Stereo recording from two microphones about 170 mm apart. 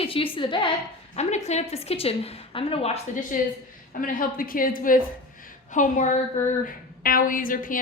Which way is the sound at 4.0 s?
55° left (ahead or behind).